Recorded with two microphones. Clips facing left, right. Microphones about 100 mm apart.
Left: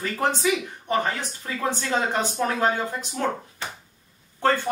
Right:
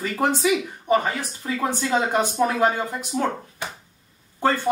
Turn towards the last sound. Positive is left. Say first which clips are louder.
# right 1 dB
turn(degrees=-10)  # may be behind; listen again after turning